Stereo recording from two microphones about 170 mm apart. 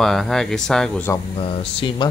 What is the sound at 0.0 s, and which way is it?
Speech, centre (ahead or behind).